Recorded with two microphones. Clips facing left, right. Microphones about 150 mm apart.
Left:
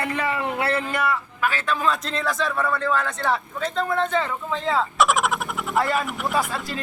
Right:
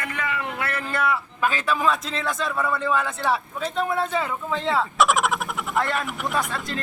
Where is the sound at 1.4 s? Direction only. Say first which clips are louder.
Right 1 dB; 20° right (ahead or behind).